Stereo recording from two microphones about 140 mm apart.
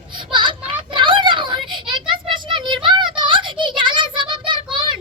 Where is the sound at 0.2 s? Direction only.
35° right (ahead or behind).